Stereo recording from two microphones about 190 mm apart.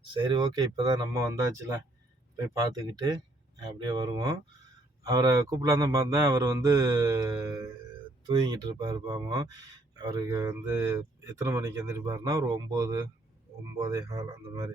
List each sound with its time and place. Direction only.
0.1 s speech: 25° right (ahead or behind)